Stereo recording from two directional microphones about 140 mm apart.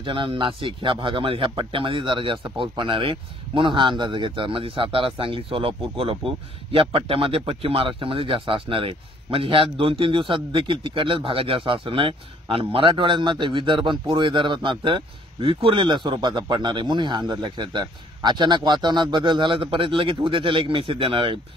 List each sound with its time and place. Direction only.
0.0 s speech: 35° right (ahead or behind)